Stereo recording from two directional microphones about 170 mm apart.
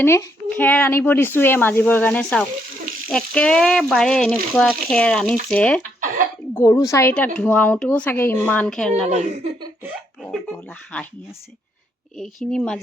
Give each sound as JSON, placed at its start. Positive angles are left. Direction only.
{"t": 0.0, "sound": "speech", "side_deg": 15}
{"t": 3.1, "sound": "frying", "side_deg": 5}
{"t": 6.6, "sound": "speech", "side_deg": 20}
{"t": 9.0, "sound": "speech", "side_deg": -40}
{"t": 10.2, "sound": "speech", "side_deg": 5}
{"t": 12.1, "sound": "frying", "side_deg": 0}